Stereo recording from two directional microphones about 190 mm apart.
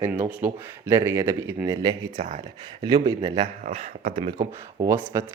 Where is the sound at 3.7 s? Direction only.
30° right (ahead or behind).